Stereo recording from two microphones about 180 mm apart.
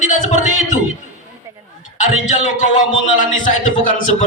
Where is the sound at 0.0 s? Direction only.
45° left (ahead or behind).